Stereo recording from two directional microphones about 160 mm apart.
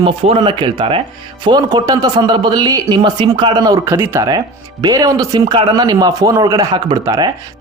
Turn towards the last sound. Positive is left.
turn(degrees=-25)  # may be behind; listen again after turning